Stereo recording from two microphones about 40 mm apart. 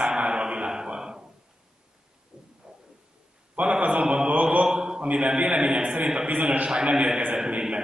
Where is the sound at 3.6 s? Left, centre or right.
Right.